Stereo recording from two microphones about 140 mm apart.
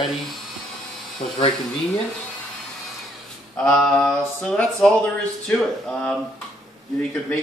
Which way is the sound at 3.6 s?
5° left (ahead or behind).